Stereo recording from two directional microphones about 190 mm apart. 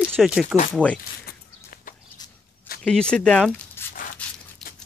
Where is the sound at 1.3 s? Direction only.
45° left (ahead or behind).